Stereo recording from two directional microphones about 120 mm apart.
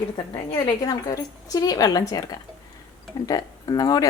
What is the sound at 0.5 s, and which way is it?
Speech, 30° left (ahead or behind).